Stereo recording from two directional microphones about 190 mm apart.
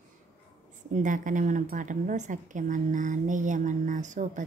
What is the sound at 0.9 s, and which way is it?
A woman's voice, 45° right (ahead or behind).